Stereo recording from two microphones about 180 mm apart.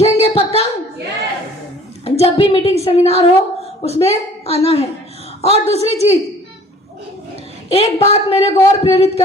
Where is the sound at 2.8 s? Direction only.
35° left (ahead or behind).